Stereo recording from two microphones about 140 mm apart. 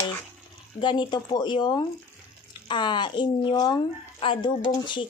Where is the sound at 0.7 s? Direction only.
35° left (ahead or behind).